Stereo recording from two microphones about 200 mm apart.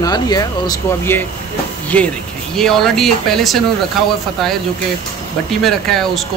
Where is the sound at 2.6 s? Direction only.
Centre (ahead or behind).